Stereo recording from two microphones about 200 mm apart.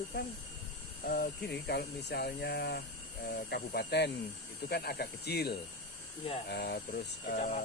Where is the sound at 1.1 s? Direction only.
50° left (ahead or behind).